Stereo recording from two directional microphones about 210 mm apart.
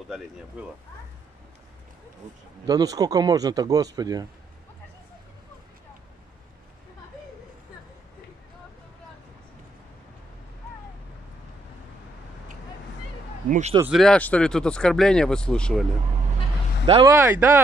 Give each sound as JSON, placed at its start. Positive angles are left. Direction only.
{"t": 0.6, "sound": "speech", "side_deg": -5}
{"t": 2.6, "sound": "speech", "side_deg": -15}
{"t": 13.5, "sound": "speech", "side_deg": -35}
{"t": 13.8, "sound": "speech", "side_deg": 0}
{"t": 16.8, "sound": "speech", "side_deg": -20}